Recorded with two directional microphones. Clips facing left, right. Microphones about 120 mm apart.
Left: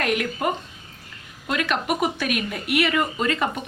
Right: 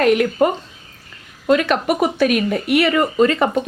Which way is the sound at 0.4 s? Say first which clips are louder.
Right 8 dB; 35° right (ahead or behind).